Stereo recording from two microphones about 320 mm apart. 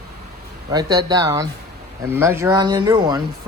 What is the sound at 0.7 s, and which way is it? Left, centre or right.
Speech, centre.